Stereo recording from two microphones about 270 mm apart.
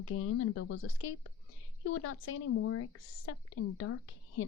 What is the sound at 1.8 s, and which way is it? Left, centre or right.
A woman's voice, left.